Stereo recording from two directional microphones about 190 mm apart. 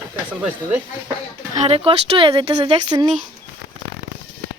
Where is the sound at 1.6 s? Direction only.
30° right (ahead or behind).